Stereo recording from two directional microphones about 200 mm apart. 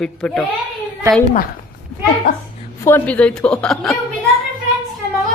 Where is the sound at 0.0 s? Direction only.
5° left (ahead or behind).